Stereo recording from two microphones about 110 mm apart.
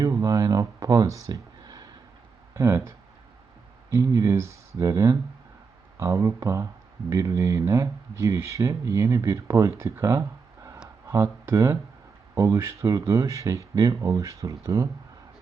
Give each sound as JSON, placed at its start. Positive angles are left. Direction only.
{"t": 0.0, "sound": "speech", "side_deg": -30}
{"t": 1.3, "sound": "a sound", "side_deg": -40}
{"t": 2.6, "sound": "speech", "side_deg": -25}